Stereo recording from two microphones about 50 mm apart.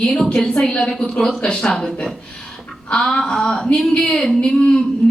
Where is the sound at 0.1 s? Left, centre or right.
Left.